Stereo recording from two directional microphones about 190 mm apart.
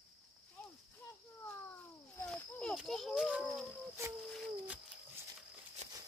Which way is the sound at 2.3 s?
5° left (ahead or behind).